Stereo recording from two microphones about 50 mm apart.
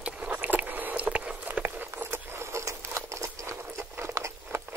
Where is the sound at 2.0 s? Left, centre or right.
Right.